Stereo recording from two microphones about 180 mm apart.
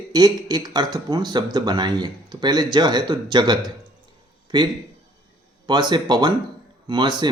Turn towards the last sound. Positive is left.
turn(degrees=-25)  # may be behind; listen again after turning